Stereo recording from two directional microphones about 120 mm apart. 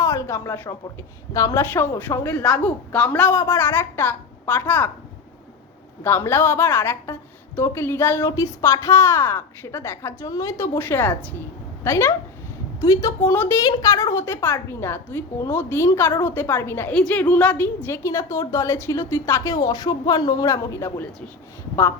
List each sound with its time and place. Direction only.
0.0 s a sound: 25° left (ahead or behind)
1.3 s a woman's voice: 30° left (ahead or behind)
2.4 s a woman's voice: 10° left (ahead or behind)
6.0 s a woman's voice: 20° left (ahead or behind)
13.6 s a woman's voice: 30° left (ahead or behind)
16.9 s a woman's voice: 10° left (ahead or behind); by 20.9 s 25° left (ahead or behind)